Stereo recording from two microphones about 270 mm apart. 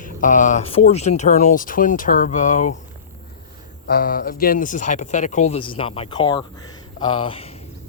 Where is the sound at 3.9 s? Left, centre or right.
Left.